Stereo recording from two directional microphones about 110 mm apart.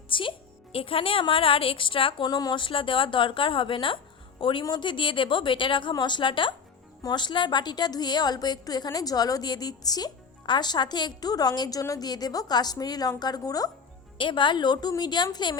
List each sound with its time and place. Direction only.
0.1 s a woman's voice: 50° left (ahead or behind); by 13.7 s 35° left (ahead or behind)
14.2 s a woman's voice: 45° left (ahead or behind)